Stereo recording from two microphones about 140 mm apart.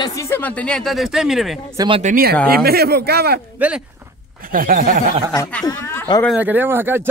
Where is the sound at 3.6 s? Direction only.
10° right (ahead or behind).